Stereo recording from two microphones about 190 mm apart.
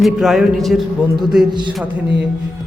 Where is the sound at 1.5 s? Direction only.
25° right (ahead or behind).